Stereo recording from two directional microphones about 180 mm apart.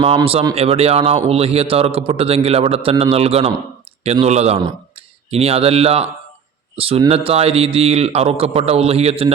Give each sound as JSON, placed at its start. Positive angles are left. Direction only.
{"t": 0.0, "sound": "a man's voice", "side_deg": -30}